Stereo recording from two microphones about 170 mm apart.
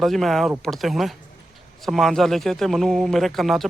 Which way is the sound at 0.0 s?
Centre (ahead or behind).